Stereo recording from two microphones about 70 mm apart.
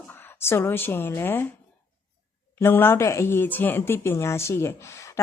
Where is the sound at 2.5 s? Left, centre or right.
Left.